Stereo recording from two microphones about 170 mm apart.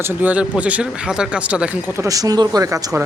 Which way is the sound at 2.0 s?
20° right (ahead or behind).